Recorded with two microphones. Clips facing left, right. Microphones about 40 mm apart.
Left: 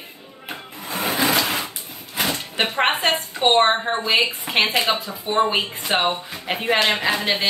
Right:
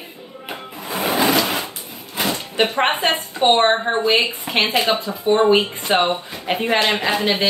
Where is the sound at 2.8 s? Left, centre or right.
Centre.